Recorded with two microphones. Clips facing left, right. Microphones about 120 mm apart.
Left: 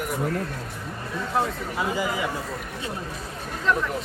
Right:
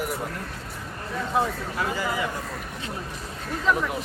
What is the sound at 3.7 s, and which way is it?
Speech, 5° right (ahead or behind).